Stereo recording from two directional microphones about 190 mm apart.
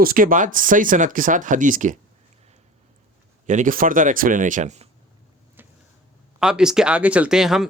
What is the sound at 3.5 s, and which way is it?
Speech, 45° right (ahead or behind).